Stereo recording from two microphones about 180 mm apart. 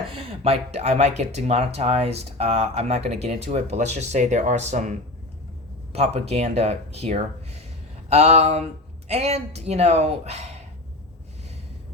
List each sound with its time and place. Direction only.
0.1 s speech: 30° right (ahead or behind)